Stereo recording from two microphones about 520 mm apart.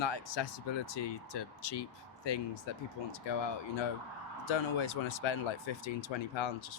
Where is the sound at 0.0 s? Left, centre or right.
Left.